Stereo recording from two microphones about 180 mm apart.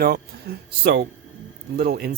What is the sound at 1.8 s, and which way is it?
Speech, 60° right (ahead or behind).